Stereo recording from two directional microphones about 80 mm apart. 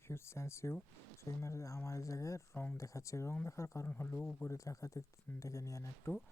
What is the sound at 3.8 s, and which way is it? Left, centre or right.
Speech, left.